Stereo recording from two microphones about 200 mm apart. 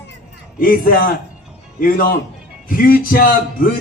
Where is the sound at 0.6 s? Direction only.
45° left (ahead or behind).